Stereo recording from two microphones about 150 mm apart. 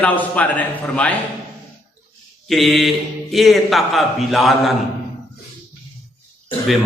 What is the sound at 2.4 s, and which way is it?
A man's voice, centre (ahead or behind).